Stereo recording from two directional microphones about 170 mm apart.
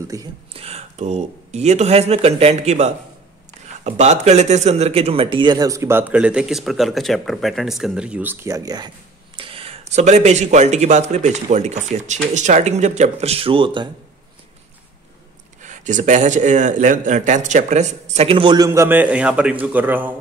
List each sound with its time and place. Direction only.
0.1 s speech: 20° right (ahead or behind)
0.5 s speech: 35° right (ahead or behind)
9.4 s speech: 35° right (ahead or behind)
15.6 s speech: 45° right (ahead or behind); by 20.2 s 10° right (ahead or behind)